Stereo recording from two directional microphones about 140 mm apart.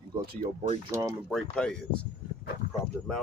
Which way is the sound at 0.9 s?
20° right (ahead or behind).